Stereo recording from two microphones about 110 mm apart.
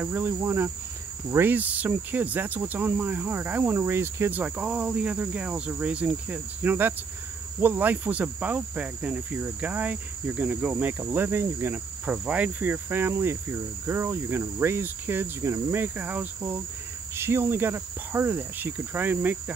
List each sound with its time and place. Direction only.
0.0 s cricket: 20° right (ahead or behind)
1.3 s speech: 20° right (ahead or behind)
12.1 s cricket: 15° right (ahead or behind)